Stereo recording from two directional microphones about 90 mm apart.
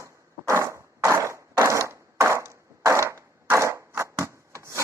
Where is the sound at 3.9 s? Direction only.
30° right (ahead or behind).